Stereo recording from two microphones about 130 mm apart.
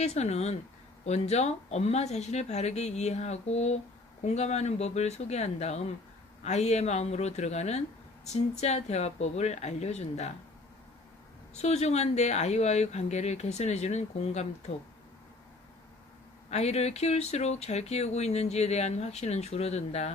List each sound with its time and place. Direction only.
0.0 s speech: 60° left (ahead or behind)
11.5 s speech: 55° left (ahead or behind)
16.5 s speech: 55° left (ahead or behind)